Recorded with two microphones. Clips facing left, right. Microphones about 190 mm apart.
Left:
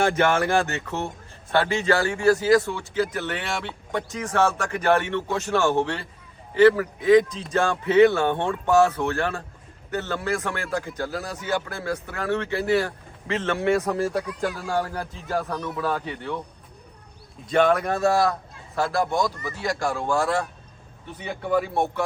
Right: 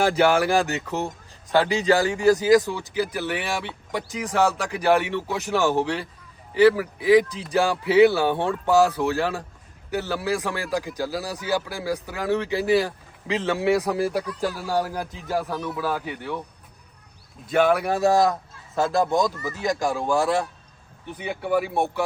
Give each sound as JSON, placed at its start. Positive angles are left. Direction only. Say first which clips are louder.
{"t": 0.0, "sound": "a man's voice", "louder": "right 2 dB", "side_deg": -10}
{"t": 17.4, "sound": "speech", "louder": "even", "side_deg": -5}